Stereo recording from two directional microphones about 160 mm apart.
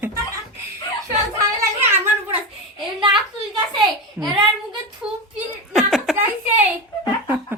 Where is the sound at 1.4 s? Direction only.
15° right (ahead or behind).